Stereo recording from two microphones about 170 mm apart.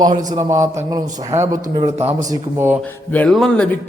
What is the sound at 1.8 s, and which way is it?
Speech, 35° right (ahead or behind).